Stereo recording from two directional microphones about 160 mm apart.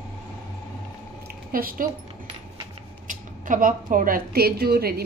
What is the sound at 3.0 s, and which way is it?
A woman's voice, 55° right (ahead or behind).